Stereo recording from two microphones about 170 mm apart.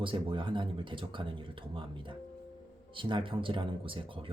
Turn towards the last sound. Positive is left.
turn(degrees=-30)  # may be behind; listen again after turning